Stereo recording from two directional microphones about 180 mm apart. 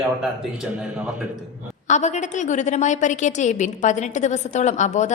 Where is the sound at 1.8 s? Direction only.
40° left (ahead or behind).